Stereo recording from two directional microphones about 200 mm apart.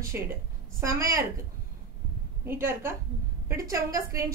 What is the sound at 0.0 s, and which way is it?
A woman's voice, 15° right (ahead or behind).